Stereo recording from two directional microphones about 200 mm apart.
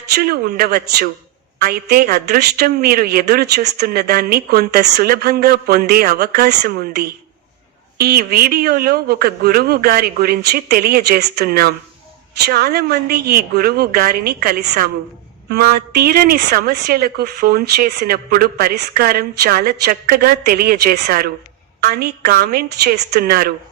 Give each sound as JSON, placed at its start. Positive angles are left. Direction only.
{"t": 0.1, "sound": "speech", "side_deg": -50}